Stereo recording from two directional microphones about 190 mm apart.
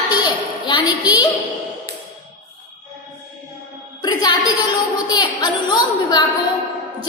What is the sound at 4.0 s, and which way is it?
Music, 20° left (ahead or behind).